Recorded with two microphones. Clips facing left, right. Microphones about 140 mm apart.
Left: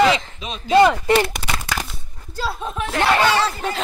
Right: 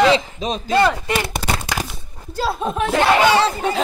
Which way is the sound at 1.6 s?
15° right (ahead or behind).